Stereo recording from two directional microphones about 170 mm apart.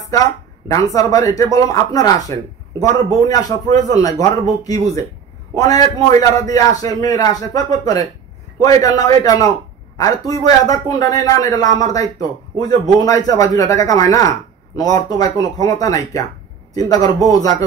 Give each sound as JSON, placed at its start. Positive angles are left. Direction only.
{"t": 0.7, "sound": "a man's voice", "side_deg": 20}